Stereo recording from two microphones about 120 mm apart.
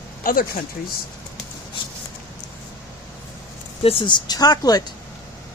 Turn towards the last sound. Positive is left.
turn(degrees=35)  # may be behind; listen again after turning